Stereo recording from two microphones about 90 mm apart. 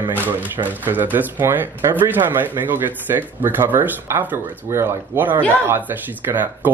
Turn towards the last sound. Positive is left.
turn(degrees=-20)  # may be behind; listen again after turning